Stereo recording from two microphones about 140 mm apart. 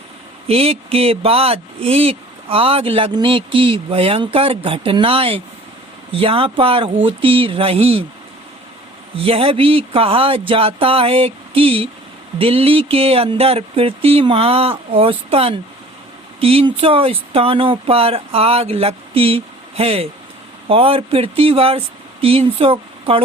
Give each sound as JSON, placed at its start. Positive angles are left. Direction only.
{"t": 0.4, "sound": "speech", "side_deg": -45}
{"t": 9.1, "sound": "speech", "side_deg": -40}